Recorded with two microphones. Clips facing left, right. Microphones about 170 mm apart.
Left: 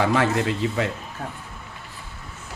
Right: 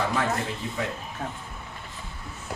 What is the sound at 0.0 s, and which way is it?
Speech, 85° left.